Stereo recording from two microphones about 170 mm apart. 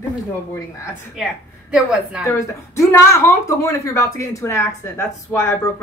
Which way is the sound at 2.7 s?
15° left (ahead or behind).